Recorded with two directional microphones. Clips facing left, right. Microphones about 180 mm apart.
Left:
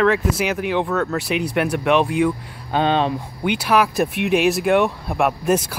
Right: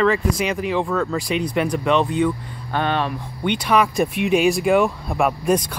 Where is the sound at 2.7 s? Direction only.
20° left (ahead or behind).